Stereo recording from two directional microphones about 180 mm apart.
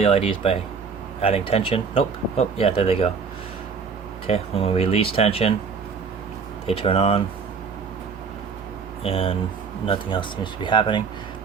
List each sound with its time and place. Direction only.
0.0 s speech: 30° left (ahead or behind)
4.3 s speech: 35° left (ahead or behind)
6.7 s speech: 30° left (ahead or behind)
9.0 s speech: 30° left (ahead or behind)